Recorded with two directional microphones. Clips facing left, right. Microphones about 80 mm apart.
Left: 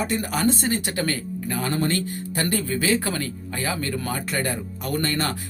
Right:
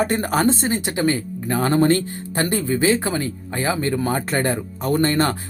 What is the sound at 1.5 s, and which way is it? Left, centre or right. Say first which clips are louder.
Speech: right 8 dB; right.